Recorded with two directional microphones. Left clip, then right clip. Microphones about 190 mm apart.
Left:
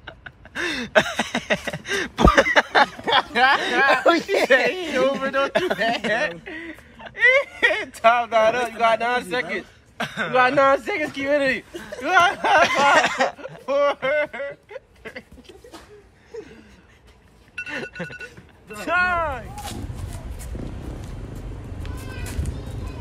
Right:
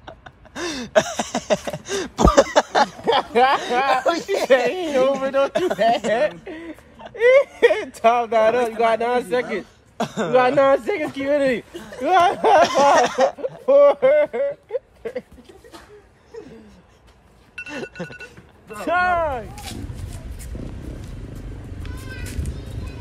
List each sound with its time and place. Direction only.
0.0 s a sound: 15° right (ahead or behind)
3.1 s a sound: 50° right (ahead or behind)
3.9 s speech: 5° right (ahead or behind)
4.5 s speech: 55° right (ahead or behind)
5.5 s a sound: 10° right (ahead or behind)
5.8 s speech: 50° right (ahead or behind)
9.9 s speech: 25° right (ahead or behind)
10.3 s speech: 55° right (ahead or behind)
11.7 s speech: 15° right (ahead or behind)
12.0 s speech: 50° right (ahead or behind)
12.6 s a sound: 10° right (ahead or behind)
13.7 s speech: 45° right (ahead or behind)
17.6 s chink: 10° right (ahead or behind)
18.8 s speech: 50° right (ahead or behind)